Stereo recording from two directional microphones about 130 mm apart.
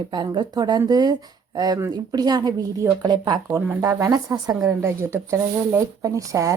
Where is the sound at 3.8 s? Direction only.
20° right (ahead or behind).